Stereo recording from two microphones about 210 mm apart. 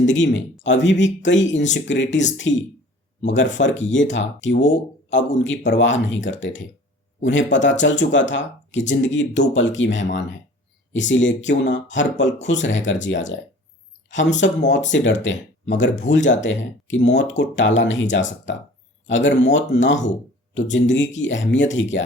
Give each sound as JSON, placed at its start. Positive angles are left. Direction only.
{"t": 0.0, "sound": "speech", "side_deg": 60}